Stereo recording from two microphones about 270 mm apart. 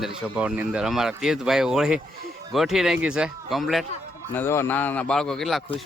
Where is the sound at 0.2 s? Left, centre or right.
Centre.